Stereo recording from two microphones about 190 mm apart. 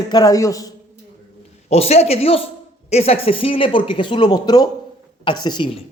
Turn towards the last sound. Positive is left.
turn(degrees=25)  # may be behind; listen again after turning